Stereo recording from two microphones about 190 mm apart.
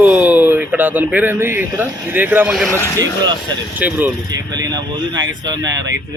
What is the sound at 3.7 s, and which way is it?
Speech, 10° right (ahead or behind).